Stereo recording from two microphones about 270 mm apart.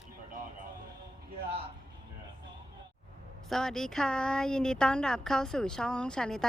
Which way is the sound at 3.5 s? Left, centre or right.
Centre.